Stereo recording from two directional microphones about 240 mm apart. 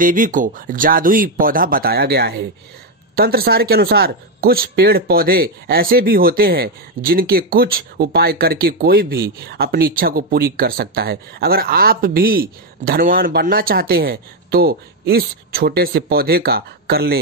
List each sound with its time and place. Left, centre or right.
0.0 s speech: right